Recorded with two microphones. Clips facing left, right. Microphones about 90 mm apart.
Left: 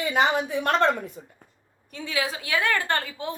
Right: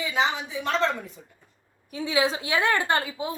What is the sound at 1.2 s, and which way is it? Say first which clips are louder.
Speech: left 6 dB; 45° left (ahead or behind).